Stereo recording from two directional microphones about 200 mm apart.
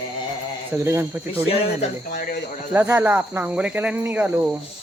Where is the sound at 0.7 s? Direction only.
10° right (ahead or behind).